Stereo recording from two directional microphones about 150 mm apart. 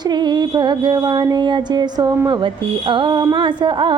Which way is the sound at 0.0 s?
30° right (ahead or behind).